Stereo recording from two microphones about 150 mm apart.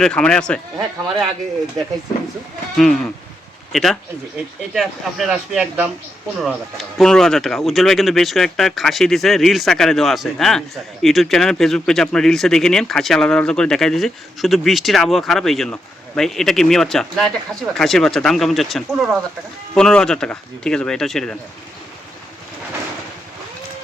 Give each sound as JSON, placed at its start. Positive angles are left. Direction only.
{"t": 0.0, "sound": "speech", "side_deg": 5}
{"t": 0.8, "sound": "speech", "side_deg": -30}
{"t": 2.7, "sound": "speech", "side_deg": 0}